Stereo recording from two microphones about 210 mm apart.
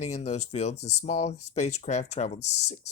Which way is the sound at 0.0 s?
30° left (ahead or behind).